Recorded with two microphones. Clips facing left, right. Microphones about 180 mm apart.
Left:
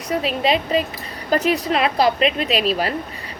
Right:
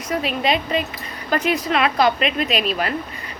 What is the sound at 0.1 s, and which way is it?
Speech, 30° left (ahead or behind).